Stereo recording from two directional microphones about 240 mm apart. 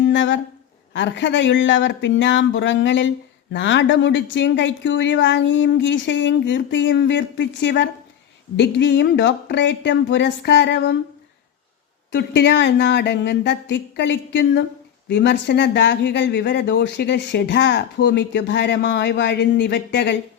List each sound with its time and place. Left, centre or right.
0.1 s speech: left
12.1 s speech: left